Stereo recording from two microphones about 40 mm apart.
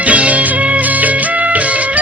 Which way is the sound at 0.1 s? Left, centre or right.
Right.